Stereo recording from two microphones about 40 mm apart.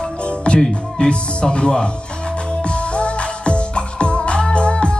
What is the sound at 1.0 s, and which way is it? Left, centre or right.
Music, left.